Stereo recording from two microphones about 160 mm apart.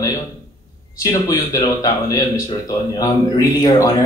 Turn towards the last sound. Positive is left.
turn(degrees=20)  # may be behind; listen again after turning